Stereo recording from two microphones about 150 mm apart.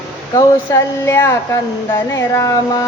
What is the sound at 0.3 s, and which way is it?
Speech, 20° left (ahead or behind).